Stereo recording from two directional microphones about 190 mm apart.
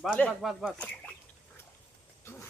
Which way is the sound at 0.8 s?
5° left (ahead or behind).